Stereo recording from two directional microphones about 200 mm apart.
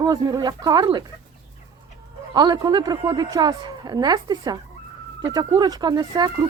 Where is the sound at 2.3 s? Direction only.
20° right (ahead or behind).